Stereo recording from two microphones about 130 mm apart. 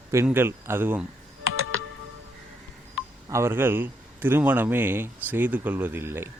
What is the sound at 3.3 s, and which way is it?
A man's voice, 20° right (ahead or behind).